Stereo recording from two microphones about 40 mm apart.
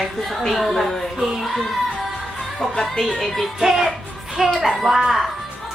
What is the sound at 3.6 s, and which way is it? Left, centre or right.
Music, centre.